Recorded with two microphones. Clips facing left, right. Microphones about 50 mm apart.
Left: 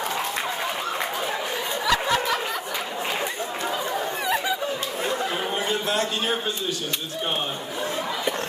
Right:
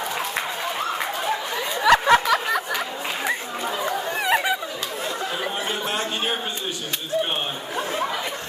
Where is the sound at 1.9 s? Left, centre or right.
Right.